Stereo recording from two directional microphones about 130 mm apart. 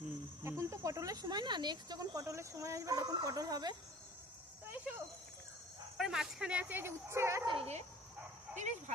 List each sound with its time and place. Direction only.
0.4 s speech: 20° right (ahead or behind)
4.6 s cricket: 15° right (ahead or behind)
6.0 s speech: 5° right (ahead or behind); by 7.4 s 20° right (ahead or behind)
7.4 s speech: 45° right (ahead or behind)